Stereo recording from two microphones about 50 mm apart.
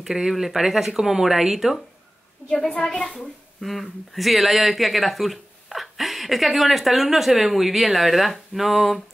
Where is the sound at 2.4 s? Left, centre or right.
Right.